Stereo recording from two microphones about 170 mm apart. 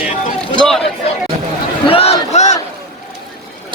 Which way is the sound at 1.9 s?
35° left (ahead or behind).